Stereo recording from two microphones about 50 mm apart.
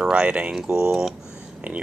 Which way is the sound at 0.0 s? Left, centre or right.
Right.